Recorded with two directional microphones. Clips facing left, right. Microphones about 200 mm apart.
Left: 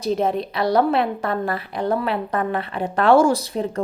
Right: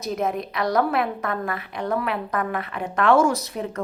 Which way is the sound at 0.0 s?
30° left (ahead or behind).